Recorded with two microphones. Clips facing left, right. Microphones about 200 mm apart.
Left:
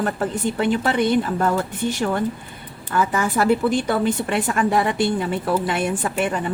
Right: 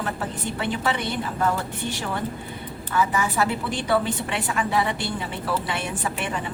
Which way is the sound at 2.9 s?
50° left (ahead or behind).